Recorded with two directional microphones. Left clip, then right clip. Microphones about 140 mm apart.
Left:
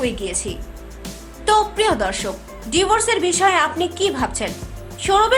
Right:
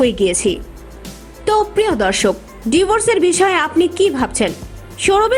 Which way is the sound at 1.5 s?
35° right (ahead or behind).